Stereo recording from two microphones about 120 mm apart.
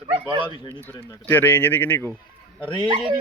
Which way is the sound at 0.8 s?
15° left (ahead or behind).